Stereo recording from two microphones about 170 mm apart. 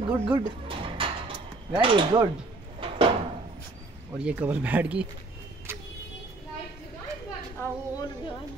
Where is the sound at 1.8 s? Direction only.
30° right (ahead or behind).